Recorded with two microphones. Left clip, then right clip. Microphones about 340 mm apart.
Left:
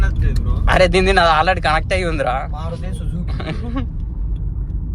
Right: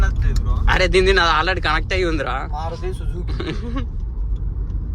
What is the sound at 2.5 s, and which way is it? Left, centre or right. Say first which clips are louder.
Speech: right 3 dB; right.